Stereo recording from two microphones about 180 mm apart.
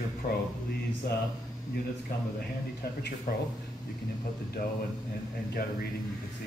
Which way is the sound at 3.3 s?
55° left (ahead or behind).